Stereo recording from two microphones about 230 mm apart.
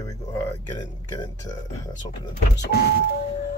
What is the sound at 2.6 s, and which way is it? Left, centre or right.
Vehicle, left.